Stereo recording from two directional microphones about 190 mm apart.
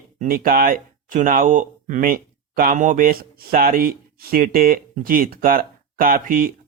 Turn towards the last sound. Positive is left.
turn(degrees=-45)  # may be behind; listen again after turning